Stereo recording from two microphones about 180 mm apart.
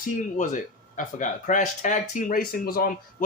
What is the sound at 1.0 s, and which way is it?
Speech, 45° left (ahead or behind).